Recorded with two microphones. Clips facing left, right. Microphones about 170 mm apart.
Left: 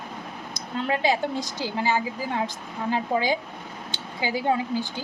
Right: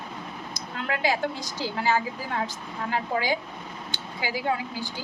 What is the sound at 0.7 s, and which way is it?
A woman's voice, 25° left (ahead or behind).